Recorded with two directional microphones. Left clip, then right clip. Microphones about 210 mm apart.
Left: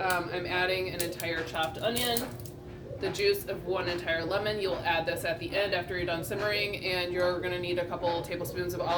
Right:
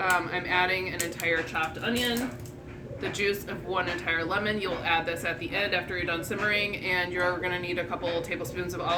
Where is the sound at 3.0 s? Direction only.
20° right (ahead or behind).